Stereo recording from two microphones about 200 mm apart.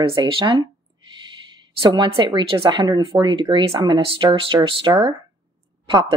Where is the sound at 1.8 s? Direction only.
25° right (ahead or behind).